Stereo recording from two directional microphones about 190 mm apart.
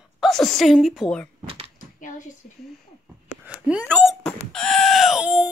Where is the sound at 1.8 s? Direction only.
40° left (ahead or behind).